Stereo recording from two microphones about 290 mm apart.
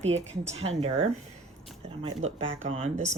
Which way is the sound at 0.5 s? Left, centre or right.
Right.